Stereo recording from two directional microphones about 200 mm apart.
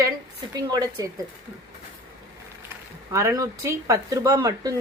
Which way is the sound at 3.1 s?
15° right (ahead or behind).